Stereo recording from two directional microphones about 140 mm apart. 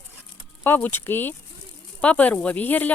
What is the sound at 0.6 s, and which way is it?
A woman's voice, 15° left (ahead or behind).